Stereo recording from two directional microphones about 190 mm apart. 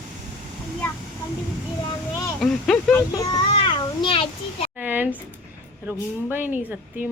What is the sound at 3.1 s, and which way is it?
Child singing, 25° left (ahead or behind).